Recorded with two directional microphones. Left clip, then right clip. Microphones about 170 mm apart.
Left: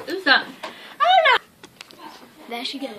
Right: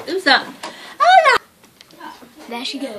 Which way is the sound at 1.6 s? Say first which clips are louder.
Right 2 dB; 50° left (ahead or behind).